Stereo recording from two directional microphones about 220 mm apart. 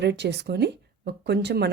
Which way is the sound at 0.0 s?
50° right (ahead or behind).